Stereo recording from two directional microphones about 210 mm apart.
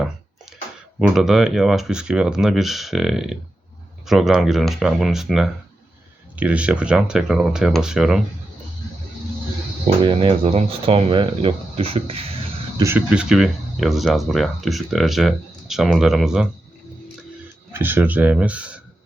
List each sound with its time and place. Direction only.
0.9 s speech: centre (ahead or behind)
9.8 s speech: 25° right (ahead or behind)
12.8 s speech: 5° right (ahead or behind)
17.7 s speech: 10° right (ahead or behind)